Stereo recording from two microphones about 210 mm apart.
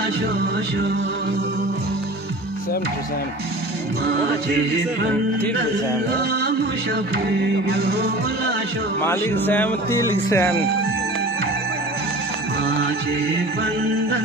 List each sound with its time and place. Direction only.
9.0 s speech: 10° left (ahead or behind)
12.6 s music: 50° right (ahead or behind)